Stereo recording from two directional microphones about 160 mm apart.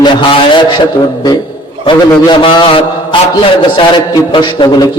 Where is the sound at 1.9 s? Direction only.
30° left (ahead or behind).